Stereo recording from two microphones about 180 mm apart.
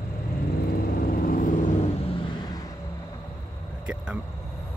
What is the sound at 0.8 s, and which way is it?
Vehicle, 55° left (ahead or behind).